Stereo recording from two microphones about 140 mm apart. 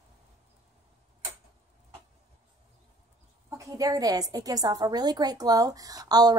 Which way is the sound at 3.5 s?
25° right (ahead or behind).